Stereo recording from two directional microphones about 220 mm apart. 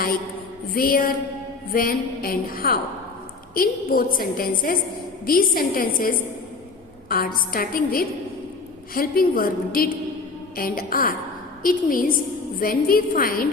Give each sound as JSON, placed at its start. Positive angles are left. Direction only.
{"t": 0.7, "sound": "a woman's voice", "side_deg": 40}